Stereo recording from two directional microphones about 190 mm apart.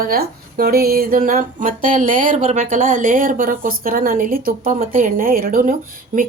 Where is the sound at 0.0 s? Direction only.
50° right (ahead or behind).